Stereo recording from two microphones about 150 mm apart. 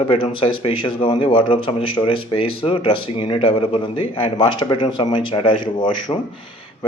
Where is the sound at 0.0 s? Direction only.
40° left (ahead or behind).